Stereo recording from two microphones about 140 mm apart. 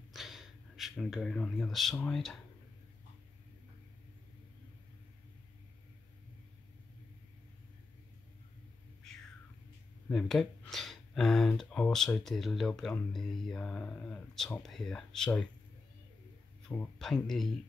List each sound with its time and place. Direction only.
0.1 s speech: centre (ahead or behind)
9.0 s a sound: 5° left (ahead or behind)
10.0 s speech: 5° left (ahead or behind)
16.6 s speech: 5° left (ahead or behind)